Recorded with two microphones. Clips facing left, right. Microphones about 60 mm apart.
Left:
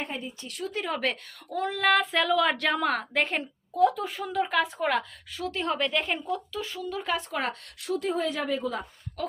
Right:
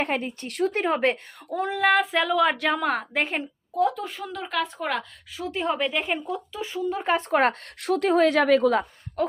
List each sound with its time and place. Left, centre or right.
0.0 s a woman's voice: right
0.9 s speech: right; by 5.0 s centre
5.4 s speech: centre
7.0 s a woman's voice: right
9.2 s a sound: right